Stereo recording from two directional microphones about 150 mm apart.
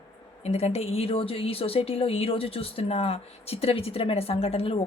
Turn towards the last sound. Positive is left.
turn(degrees=40)  # may be behind; listen again after turning